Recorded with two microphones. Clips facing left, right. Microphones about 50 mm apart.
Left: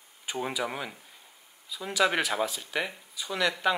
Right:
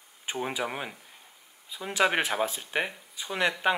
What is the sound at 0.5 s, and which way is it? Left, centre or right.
Speech, centre.